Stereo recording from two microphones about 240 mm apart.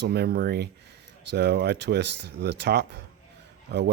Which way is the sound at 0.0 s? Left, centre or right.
Right.